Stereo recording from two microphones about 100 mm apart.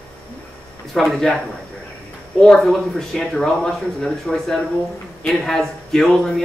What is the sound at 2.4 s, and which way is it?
Speech, 5° left (ahead or behind).